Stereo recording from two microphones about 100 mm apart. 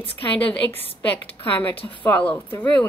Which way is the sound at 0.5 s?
20° left (ahead or behind).